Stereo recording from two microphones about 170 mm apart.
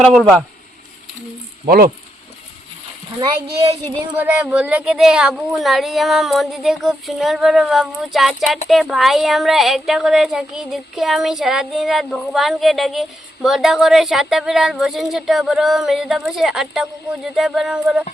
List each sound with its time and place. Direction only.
0.0 s speech: centre (ahead or behind)
1.6 s speech: 60° right (ahead or behind)
4.1 s speech: 10° right (ahead or behind)